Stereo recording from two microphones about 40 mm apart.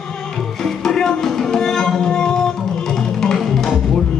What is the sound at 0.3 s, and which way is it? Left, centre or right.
Music, centre.